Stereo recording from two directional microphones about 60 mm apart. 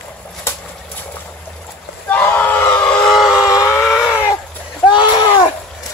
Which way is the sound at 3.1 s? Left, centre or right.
Centre.